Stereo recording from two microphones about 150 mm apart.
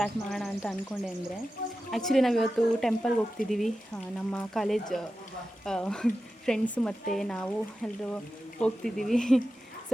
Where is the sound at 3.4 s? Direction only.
65° left (ahead or behind).